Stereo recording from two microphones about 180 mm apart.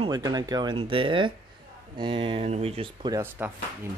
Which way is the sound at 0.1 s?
20° right (ahead or behind).